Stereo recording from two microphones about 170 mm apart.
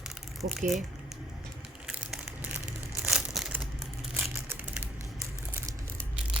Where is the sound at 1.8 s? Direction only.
5° right (ahead or behind).